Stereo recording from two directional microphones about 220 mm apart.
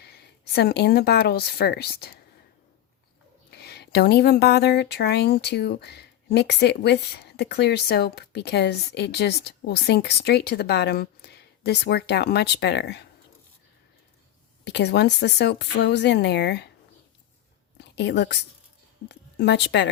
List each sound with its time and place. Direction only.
0.0 s speech: 45° left (ahead or behind)
3.5 s speech: 45° left (ahead or behind)
14.6 s speech: 50° left (ahead or behind)
17.9 s a woman's voice: 50° left (ahead or behind)